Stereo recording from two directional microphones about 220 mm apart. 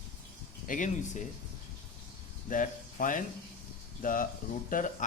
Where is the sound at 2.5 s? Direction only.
35° left (ahead or behind).